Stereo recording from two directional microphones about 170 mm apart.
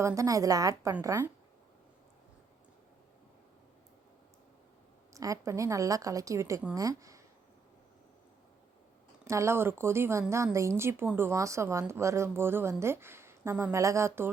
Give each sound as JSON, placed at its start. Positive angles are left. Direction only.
{"t": 0.0, "sound": "a woman's voice", "side_deg": -20}
{"t": 5.1, "sound": "a woman's voice", "side_deg": -20}
{"t": 9.2, "sound": "speech", "side_deg": -15}